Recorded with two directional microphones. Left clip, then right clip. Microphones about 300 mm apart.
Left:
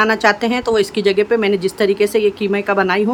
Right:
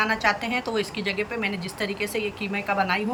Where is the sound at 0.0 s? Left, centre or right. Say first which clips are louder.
Left 9 dB; centre.